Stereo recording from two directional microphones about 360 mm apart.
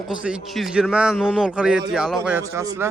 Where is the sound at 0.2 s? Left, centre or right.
Centre.